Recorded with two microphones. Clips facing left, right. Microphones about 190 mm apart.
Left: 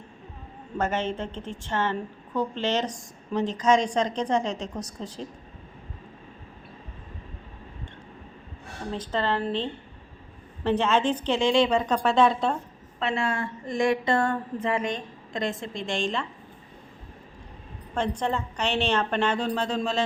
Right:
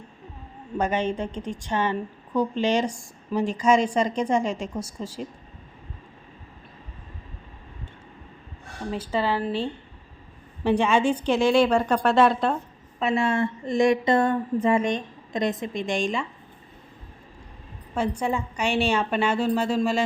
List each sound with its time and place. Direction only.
0.8 s a woman's voice: 15° right (ahead or behind)
8.9 s a woman's voice: 10° right (ahead or behind)
13.0 s speech: 25° right (ahead or behind)
17.9 s a woman's voice: 10° right (ahead or behind)